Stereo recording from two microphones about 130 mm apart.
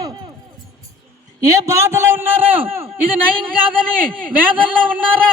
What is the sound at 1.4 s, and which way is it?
A man's voice, 25° right (ahead or behind).